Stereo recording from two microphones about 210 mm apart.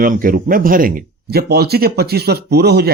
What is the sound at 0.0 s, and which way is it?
Speech, 40° right (ahead or behind).